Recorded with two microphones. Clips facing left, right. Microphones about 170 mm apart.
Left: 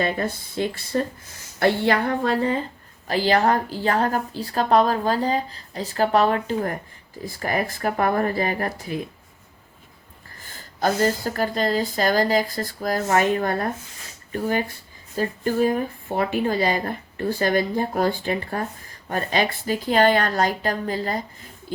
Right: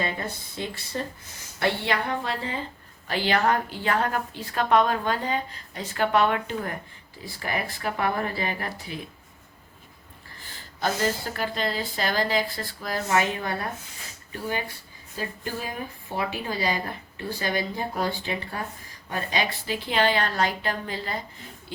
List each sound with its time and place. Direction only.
0.0 s a woman's voice: 55° left (ahead or behind)
10.8 s a woman's voice: 45° left (ahead or behind)